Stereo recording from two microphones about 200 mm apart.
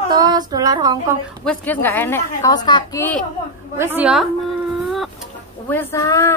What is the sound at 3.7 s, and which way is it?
Speech, 10° right (ahead or behind).